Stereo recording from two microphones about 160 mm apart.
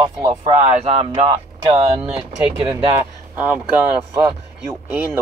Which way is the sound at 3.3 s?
10° right (ahead or behind).